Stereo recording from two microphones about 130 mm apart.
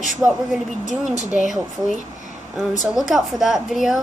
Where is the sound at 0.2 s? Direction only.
20° right (ahead or behind).